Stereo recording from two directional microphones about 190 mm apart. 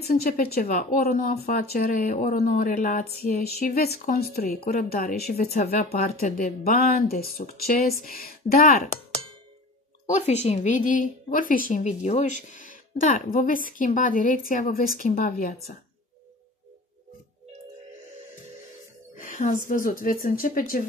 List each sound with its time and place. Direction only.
0.0 s a woman's voice: 50° left (ahead or behind)
5.4 s speech: 35° left (ahead or behind)
5.9 s a woman's voice: 50° left (ahead or behind)
10.1 s a woman's voice: 35° left (ahead or behind)
19.1 s a sound: 40° left (ahead or behind)
19.7 s a woman's voice: 45° left (ahead or behind)